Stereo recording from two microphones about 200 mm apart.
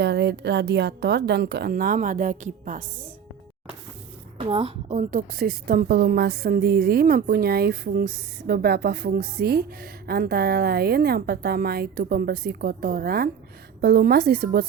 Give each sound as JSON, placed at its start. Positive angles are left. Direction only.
{"t": 0.0, "sound": "a woman's voice", "side_deg": -60}
{"t": 1.7, "sound": "a woman's voice", "side_deg": -45}
{"t": 4.4, "sound": "a woman's voice", "side_deg": -30}
{"t": 5.3, "sound": "a woman's voice", "side_deg": -50}